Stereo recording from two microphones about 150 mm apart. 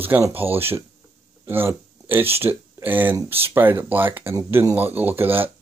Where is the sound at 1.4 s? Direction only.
15° right (ahead or behind).